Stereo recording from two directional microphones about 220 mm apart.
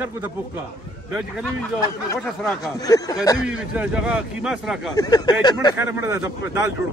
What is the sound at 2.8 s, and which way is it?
Speech, 15° left (ahead or behind).